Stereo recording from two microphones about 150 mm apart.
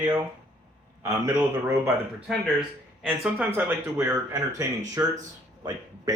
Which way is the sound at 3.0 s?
10° right (ahead or behind).